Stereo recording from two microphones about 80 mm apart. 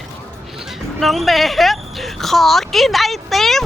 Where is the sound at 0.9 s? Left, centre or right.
Centre.